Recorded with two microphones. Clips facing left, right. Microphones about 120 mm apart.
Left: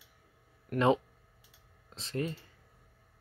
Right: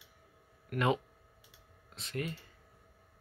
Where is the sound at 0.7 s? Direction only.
30° left (ahead or behind).